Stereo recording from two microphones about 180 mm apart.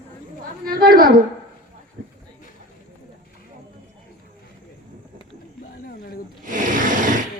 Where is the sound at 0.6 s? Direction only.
55° right (ahead or behind).